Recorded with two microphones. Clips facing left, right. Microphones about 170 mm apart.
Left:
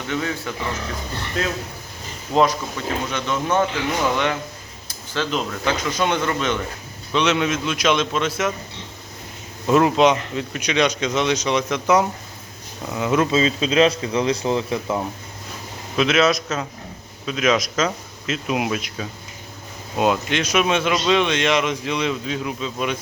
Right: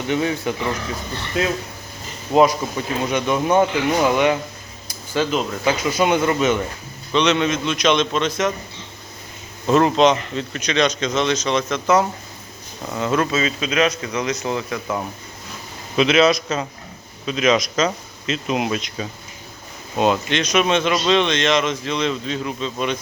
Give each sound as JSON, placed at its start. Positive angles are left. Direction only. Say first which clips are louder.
{"t": 0.1, "sound": "speech", "louder": "right 5 dB", "side_deg": -20}
{"t": 1.4, "sound": "speech", "louder": "right 4 dB", "side_deg": -10}
{"t": 7.1, "sound": "speech", "louder": "right 2 dB", "side_deg": 5}
{"t": 9.6, "sound": "speech", "louder": "right 1 dB", "side_deg": 5}
{"t": 13.3, "sound": "a man's voice", "louder": "left 3 dB", "side_deg": 30}
{"t": 16.0, "sound": "speech", "louder": "right 2 dB", "side_deg": 0}